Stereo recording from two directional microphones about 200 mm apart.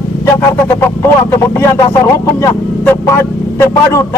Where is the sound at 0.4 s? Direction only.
15° left (ahead or behind).